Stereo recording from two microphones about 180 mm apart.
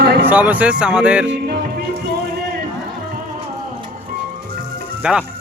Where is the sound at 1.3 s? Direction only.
65° right (ahead or behind).